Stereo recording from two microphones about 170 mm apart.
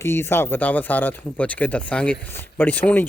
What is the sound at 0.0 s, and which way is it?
Speech, 15° left (ahead or behind).